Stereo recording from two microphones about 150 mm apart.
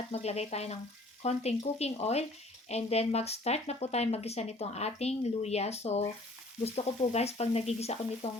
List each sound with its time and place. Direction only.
0.1 s speech: 45° left (ahead or behind)